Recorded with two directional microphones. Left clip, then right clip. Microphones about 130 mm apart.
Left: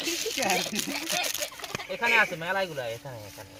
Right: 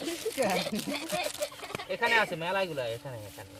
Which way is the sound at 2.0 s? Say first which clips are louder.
Left 3 dB; 35° right (ahead or behind).